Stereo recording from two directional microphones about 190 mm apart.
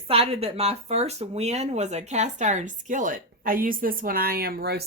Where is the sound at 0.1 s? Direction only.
30° right (ahead or behind).